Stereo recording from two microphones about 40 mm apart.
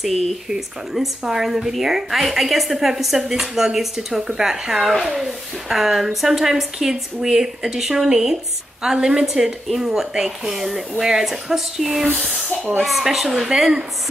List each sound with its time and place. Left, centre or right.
0.5 s a woman's voice: centre
9.2 s a woman's voice: centre